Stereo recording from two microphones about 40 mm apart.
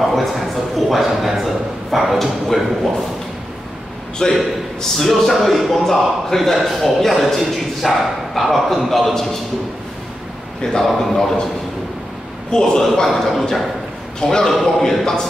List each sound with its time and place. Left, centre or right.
0.0 s a man's voice: centre
4.2 s a man's voice: centre
4.9 s a man's voice: centre
10.6 s a man's voice: centre
10.9 s a man's voice: centre
12.4 s a man's voice: centre
12.9 s a sound: centre